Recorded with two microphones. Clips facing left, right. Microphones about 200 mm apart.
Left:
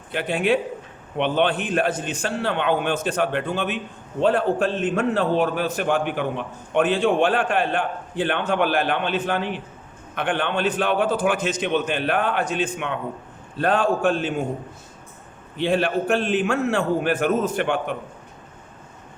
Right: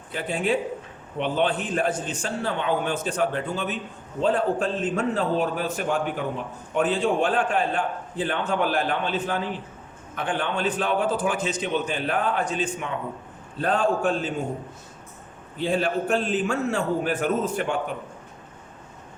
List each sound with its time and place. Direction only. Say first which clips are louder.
0.1 s a man's voice: left 4 dB; 70° left (ahead or behind)
15.5 s a man's voice: left 3 dB; 70° left (ahead or behind)